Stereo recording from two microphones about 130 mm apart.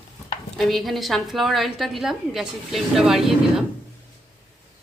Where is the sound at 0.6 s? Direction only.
Centre (ahead or behind).